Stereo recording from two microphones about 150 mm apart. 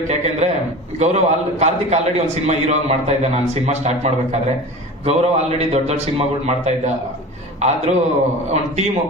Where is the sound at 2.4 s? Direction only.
45° right (ahead or behind).